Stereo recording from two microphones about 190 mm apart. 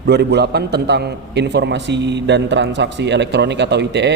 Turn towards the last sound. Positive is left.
turn(degrees=-65)  # may be behind; listen again after turning